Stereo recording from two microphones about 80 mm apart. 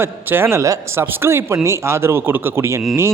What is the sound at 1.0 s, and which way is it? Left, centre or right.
A man's voice, right.